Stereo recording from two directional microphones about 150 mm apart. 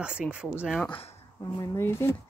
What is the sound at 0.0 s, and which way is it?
Speech, 5° right (ahead or behind).